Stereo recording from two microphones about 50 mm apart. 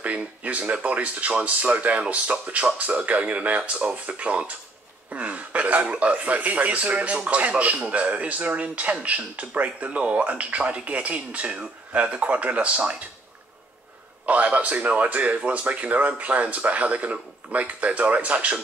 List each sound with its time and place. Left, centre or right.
0.0 s speech: right
14.2 s speech: right